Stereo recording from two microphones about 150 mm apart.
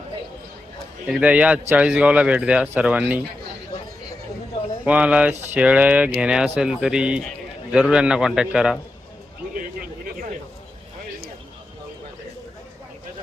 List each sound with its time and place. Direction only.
1.0 s speech: 10° right (ahead or behind)
4.9 s a man's voice: 10° right (ahead or behind)